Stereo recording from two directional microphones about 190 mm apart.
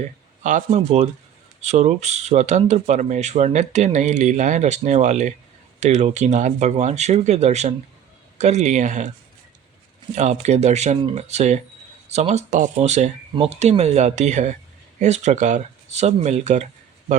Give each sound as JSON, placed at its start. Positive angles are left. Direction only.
{"t": 0.0, "sound": "speech", "side_deg": -40}
{"t": 10.2, "sound": "speech", "side_deg": -35}